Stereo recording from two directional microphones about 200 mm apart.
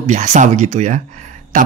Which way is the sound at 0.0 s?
35° right (ahead or behind).